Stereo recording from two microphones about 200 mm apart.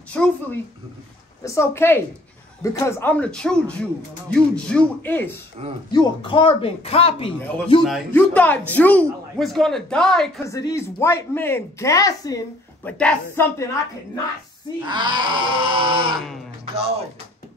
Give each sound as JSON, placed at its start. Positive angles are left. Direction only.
{"t": 0.1, "sound": "a woman's voice", "side_deg": 5}
{"t": 5.9, "sound": "speech", "side_deg": 20}
{"t": 7.4, "sound": "a woman's voice", "side_deg": 10}
{"t": 10.4, "sound": "speech", "side_deg": 15}
{"t": 14.9, "sound": "grunt", "side_deg": -25}